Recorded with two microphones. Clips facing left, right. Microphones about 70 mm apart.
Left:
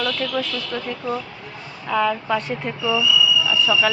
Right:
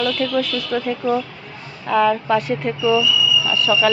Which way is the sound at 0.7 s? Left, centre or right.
Centre.